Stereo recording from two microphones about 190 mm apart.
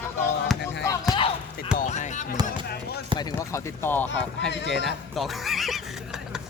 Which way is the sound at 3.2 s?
15° left (ahead or behind).